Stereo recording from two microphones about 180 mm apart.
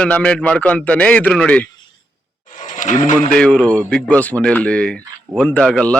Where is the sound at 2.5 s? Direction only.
45° left (ahead or behind).